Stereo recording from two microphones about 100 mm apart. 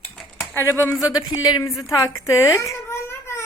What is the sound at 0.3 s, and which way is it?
A child's voice, 20° left (ahead or behind).